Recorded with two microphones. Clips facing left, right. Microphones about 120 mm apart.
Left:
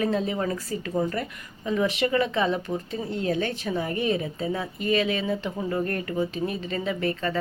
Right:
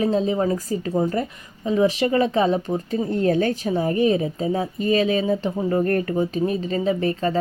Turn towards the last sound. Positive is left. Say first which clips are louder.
# right 5 dB
turn(degrees=-35)  # may be behind; listen again after turning